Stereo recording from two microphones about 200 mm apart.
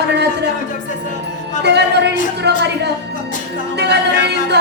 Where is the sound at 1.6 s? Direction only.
55° right (ahead or behind).